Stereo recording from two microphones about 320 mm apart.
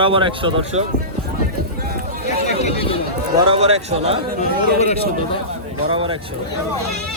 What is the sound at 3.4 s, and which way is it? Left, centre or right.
Speech, centre.